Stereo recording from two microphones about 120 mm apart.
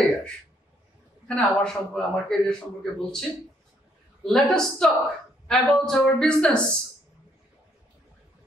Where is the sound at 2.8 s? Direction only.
5° left (ahead or behind).